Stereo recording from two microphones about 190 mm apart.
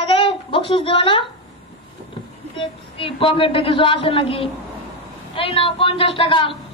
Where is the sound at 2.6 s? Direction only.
30° left (ahead or behind).